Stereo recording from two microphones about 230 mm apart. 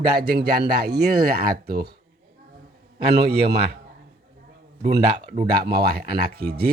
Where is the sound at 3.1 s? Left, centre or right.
Right.